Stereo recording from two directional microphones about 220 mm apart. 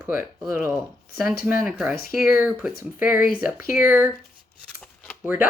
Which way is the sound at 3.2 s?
40° left (ahead or behind).